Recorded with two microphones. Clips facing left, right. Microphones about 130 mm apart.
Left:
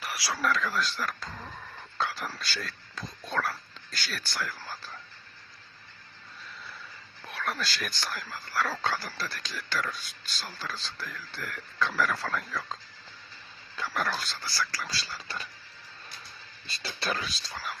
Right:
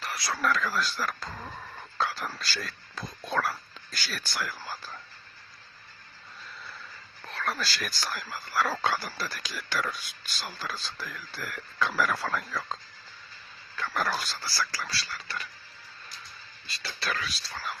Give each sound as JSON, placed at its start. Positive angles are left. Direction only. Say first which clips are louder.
{"t": 0.3, "sound": "speech", "louder": "right 1 dB", "side_deg": 0}
{"t": 7.3, "sound": "speech", "louder": "right 1 dB", "side_deg": 0}
{"t": 13.9, "sound": "speech", "louder": "right 2 dB", "side_deg": -5}
{"t": 14.8, "sound": "speech", "louder": "right 1 dB", "side_deg": 25}
{"t": 16.6, "sound": "speech", "louder": "left 1 dB", "side_deg": 25}
{"t": 17.5, "sound": "speech", "louder": "right 1 dB", "side_deg": 5}